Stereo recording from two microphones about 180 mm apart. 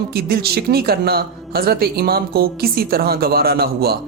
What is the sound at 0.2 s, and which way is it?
Speech, 60° right (ahead or behind).